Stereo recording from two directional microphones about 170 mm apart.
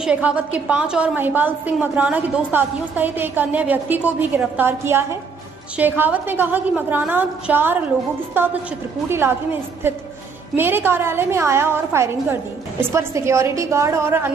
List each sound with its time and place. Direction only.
0.0 s a woman's voice: 5° right (ahead or behind)
9.1 s a woman's voice: 15° right (ahead or behind)